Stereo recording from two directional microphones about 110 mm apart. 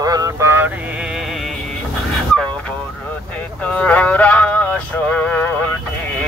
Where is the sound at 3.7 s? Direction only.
10° left (ahead or behind).